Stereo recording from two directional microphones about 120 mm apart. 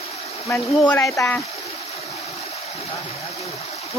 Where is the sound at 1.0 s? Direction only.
25° left (ahead or behind).